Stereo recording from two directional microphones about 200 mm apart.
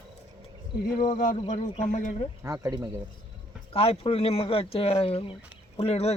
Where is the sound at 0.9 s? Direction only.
40° left (ahead or behind).